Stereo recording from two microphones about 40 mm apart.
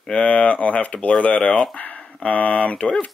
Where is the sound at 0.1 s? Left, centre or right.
Left.